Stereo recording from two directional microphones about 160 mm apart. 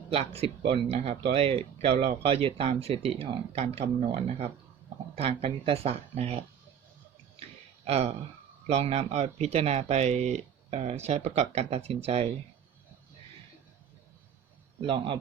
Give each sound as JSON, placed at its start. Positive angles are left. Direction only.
{"t": 0.1, "sound": "speech", "side_deg": -35}
{"t": 7.9, "sound": "speech", "side_deg": -40}
{"t": 14.8, "sound": "speech", "side_deg": -30}